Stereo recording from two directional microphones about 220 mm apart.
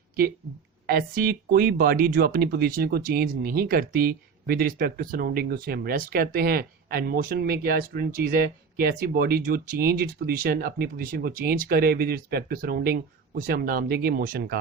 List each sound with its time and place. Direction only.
0.9 s speech: 45° right (ahead or behind)